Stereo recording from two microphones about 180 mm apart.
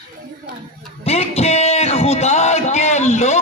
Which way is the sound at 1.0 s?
35° left (ahead or behind).